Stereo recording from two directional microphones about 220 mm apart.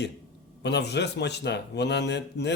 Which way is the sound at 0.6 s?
50° left (ahead or behind).